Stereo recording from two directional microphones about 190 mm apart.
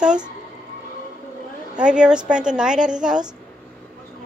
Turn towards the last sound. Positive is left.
turn(degrees=-5)  # may be behind; listen again after turning